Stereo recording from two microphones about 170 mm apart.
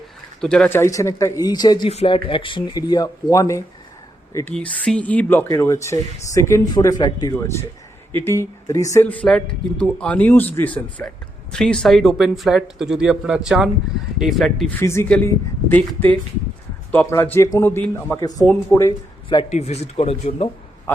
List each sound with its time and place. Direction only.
0.4 s speech: 5° left (ahead or behind); by 1.9 s 25° left (ahead or behind)
1.9 s speech: 35° left (ahead or behind); by 4.5 s 15° left (ahead or behind)
4.5 s speech: 5° left (ahead or behind)
14.8 s speech: 15° left (ahead or behind)
19.5 s speech: 40° left (ahead or behind)